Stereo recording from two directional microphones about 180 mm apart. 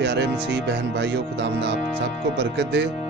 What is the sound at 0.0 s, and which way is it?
Speech, 70° right (ahead or behind).